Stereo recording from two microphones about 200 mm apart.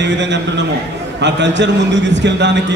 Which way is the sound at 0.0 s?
60° right (ahead or behind).